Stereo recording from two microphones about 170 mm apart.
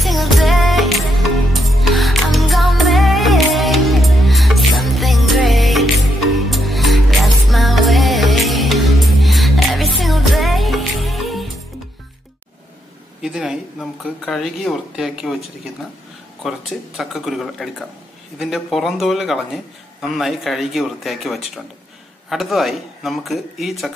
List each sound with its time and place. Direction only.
0.0 s music: centre (ahead or behind)
13.2 s a sound: 5° right (ahead or behind)
16.4 s speech: centre (ahead or behind)